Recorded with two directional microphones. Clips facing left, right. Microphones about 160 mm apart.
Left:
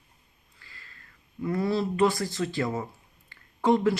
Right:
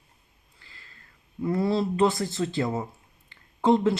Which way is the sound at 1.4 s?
25° right (ahead or behind).